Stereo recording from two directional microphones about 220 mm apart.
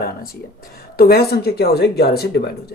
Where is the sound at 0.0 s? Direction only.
45° left (ahead or behind).